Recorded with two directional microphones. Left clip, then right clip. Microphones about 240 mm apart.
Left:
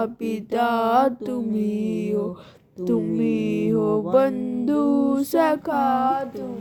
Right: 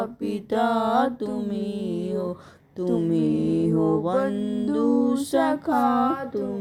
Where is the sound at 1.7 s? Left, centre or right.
Left.